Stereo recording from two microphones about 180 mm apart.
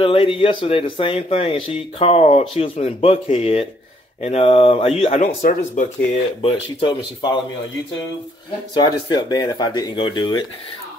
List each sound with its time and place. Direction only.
0.0 s speech: 30° left (ahead or behind); by 5.9 s 45° left (ahead or behind)
6.4 s speech: 30° left (ahead or behind)
8.7 s speech: 20° left (ahead or behind)